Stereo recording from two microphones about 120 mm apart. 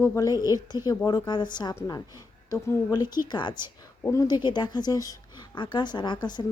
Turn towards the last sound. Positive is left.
turn(degrees=35)  # may be behind; listen again after turning